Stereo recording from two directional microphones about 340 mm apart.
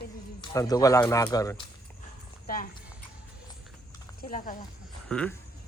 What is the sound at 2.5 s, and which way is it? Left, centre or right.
Speech, left.